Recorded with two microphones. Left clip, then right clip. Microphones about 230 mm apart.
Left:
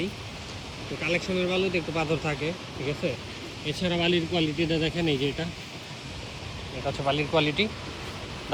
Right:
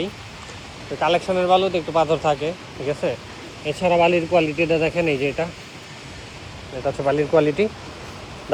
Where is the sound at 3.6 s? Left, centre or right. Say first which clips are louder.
Right 10 dB; right.